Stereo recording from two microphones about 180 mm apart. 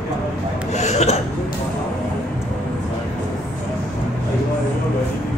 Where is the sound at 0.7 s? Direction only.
40° left (ahead or behind).